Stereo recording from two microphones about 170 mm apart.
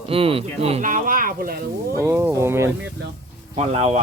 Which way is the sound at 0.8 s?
50° right (ahead or behind).